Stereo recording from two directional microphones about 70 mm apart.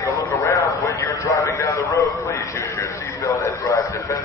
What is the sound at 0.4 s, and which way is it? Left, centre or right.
A man's voice, left.